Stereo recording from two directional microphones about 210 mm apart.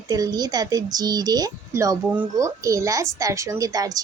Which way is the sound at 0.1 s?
20° right (ahead or behind).